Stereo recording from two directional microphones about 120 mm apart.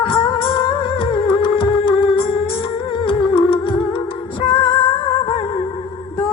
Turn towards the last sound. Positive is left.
turn(degrees=45)  # may be behind; listen again after turning